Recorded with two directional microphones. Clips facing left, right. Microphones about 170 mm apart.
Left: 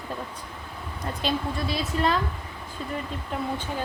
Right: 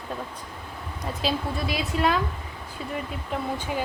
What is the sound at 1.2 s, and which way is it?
Speech, 10° right (ahead or behind).